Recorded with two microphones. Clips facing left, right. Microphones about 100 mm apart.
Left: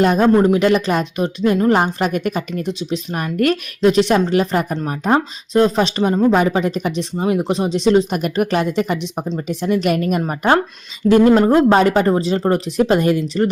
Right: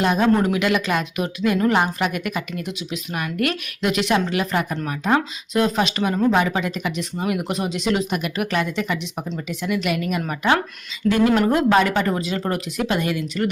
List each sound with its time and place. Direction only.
0.0 s a woman's voice: 40° left (ahead or behind)
0.3 s a woman's voice: 30° left (ahead or behind)